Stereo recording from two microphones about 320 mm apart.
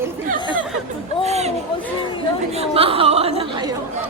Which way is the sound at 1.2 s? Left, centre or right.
Centre.